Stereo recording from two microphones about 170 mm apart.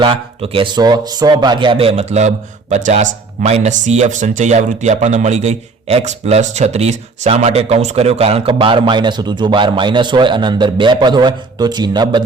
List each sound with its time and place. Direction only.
0.0 s speech: 30° right (ahead or behind)